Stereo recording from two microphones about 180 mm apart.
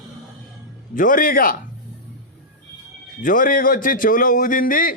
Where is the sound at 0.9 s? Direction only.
50° left (ahead or behind).